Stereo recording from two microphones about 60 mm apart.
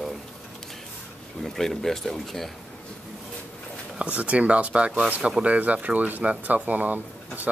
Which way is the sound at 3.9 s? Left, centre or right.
Centre.